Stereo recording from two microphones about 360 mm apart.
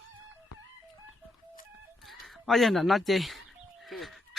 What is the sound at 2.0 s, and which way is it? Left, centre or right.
Speech, centre.